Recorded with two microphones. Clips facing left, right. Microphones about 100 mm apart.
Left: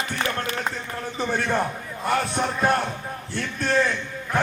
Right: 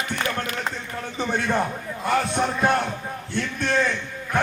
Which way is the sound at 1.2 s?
Centre (ahead or behind).